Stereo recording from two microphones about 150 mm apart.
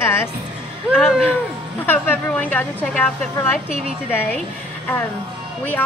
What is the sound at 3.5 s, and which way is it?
Speech, 5° right (ahead or behind).